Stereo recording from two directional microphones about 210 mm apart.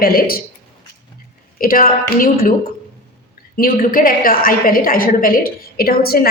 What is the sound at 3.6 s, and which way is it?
A woman's voice, 40° left (ahead or behind).